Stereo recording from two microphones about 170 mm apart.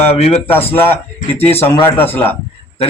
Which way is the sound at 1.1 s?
40° left (ahead or behind).